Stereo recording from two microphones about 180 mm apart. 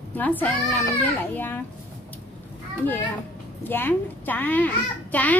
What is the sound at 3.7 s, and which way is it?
A woman's voice, 10° left (ahead or behind).